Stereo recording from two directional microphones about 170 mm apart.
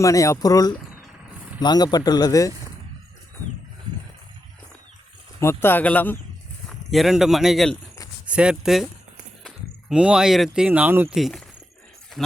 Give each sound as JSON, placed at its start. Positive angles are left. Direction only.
{"t": 0.0, "sound": "speech", "side_deg": 20}
{"t": 3.9, "sound": "a sound", "side_deg": -25}
{"t": 5.4, "sound": "speech", "side_deg": 15}
{"t": 9.9, "sound": "speech", "side_deg": -5}
{"t": 11.2, "sound": "speech", "side_deg": 0}